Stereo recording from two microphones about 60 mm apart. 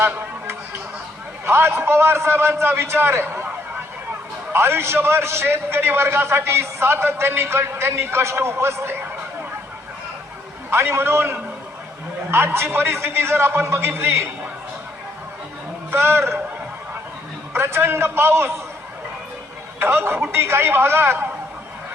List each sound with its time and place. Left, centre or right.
0.0 s a sound: right
1.5 s a man's voice: right
10.7 s a man's voice: right
15.9 s a man's voice: right
17.5 s a man's voice: right
19.8 s a man's voice: right